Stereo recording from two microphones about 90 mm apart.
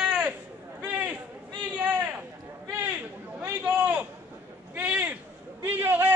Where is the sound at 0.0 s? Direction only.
10° right (ahead or behind).